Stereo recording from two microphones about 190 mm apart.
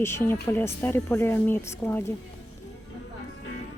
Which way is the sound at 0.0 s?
15° left (ahead or behind).